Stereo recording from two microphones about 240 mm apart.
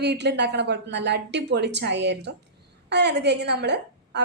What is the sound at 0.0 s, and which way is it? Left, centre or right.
A woman's voice, right.